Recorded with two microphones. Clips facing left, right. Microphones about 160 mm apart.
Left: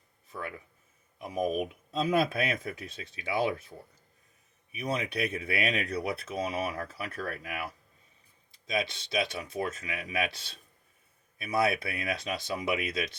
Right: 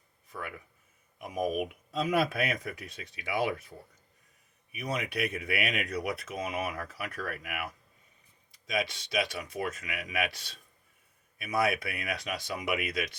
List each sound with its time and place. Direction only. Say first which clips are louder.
0.3 s speech: left 2 dB; 30° left (ahead or behind)
4.8 s speech: left 1 dB; 25° left (ahead or behind)